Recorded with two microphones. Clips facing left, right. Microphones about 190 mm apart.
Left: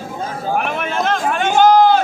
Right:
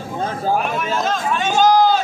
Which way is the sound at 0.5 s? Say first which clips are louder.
Left 1 dB; 60° left (ahead or behind).